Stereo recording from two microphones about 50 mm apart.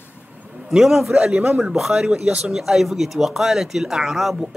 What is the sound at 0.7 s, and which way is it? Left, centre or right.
Speech, centre.